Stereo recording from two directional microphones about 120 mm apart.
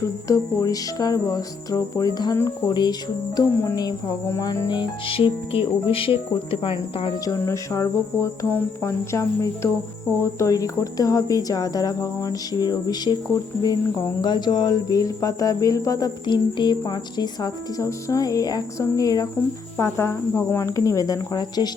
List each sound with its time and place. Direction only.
0.3 s cricket: 30° left (ahead or behind)
2.6 s speech: 35° left (ahead or behind)
3.3 s cricket: 30° left (ahead or behind)
4.7 s cricket: 45° left (ahead or behind)
7.3 s cricket: 25° left (ahead or behind)
10.2 s speech: 25° left (ahead or behind)
19.7 s cricket: 20° left (ahead or behind)